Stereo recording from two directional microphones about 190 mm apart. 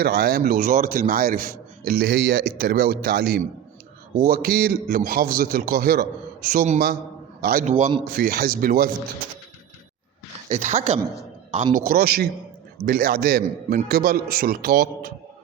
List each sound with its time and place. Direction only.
0.0 s a man's voice: 55° right (ahead or behind); by 8.0 s 35° right (ahead or behind)
8.0 s a man's voice: 50° right (ahead or behind)
10.5 s a man's voice: 40° right (ahead or behind)
11.7 s a man's voice: 55° right (ahead or behind)